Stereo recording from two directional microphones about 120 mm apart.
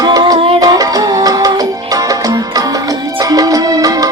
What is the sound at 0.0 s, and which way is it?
Music, 30° right (ahead or behind).